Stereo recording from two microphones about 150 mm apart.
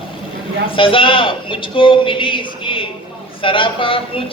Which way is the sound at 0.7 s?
35° left (ahead or behind).